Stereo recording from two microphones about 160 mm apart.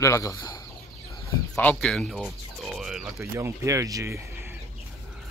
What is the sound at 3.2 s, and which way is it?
Speech, 15° right (ahead or behind).